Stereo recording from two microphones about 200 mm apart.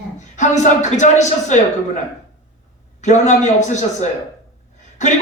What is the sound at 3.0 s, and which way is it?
Speech, 35° left (ahead or behind).